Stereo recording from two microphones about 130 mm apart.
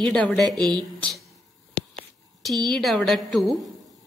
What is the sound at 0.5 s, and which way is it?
Speech, 35° right (ahead or behind).